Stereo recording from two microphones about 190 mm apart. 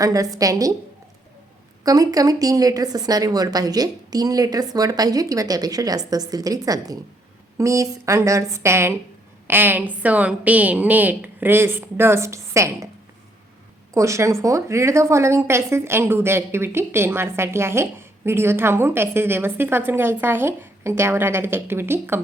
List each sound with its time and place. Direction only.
0.0 s a woman's voice: 20° right (ahead or behind)
1.8 s a woman's voice: 20° right (ahead or behind)
13.9 s a woman's voice: 15° right (ahead or behind)